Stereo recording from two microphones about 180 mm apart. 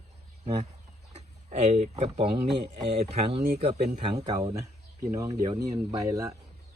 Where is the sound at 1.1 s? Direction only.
40° right (ahead or behind).